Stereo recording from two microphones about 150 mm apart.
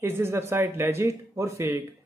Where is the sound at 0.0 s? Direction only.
15° right (ahead or behind).